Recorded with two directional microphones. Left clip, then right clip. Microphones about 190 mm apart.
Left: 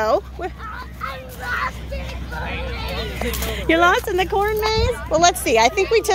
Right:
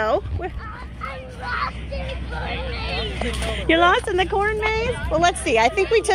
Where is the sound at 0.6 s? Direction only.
60° left (ahead or behind).